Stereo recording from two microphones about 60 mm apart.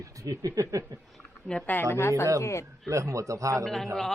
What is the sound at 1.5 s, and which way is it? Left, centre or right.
Speech, centre.